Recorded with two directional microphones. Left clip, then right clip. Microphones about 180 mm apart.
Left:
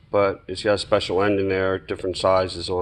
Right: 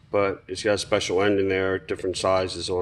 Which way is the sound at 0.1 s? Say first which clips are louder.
Left 3 dB; centre (ahead or behind).